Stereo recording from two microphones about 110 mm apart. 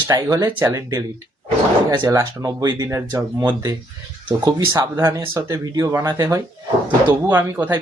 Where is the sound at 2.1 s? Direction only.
30° right (ahead or behind).